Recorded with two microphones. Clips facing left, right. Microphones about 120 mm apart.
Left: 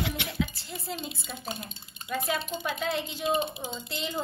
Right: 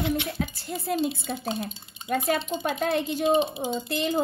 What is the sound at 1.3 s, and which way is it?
Speech, 30° right (ahead or behind).